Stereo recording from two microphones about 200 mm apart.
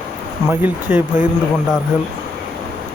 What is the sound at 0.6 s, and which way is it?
Speech, 5° right (ahead or behind).